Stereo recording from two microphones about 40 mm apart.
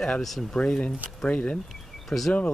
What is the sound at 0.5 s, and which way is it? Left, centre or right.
Speech, left.